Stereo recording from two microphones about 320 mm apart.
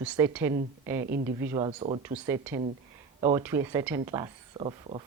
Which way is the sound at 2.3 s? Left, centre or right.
Centre.